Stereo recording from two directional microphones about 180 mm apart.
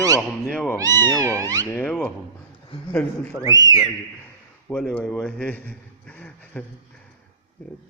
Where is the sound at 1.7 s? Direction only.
10° left (ahead or behind).